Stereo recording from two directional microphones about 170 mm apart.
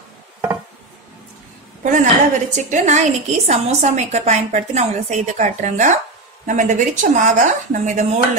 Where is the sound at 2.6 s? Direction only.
45° right (ahead or behind).